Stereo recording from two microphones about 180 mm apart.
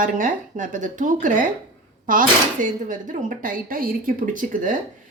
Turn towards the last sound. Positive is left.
turn(degrees=-45)  # may be behind; listen again after turning